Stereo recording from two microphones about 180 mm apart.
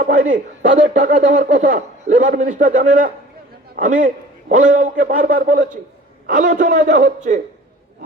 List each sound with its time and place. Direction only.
0.0 s speech: 45° right (ahead or behind)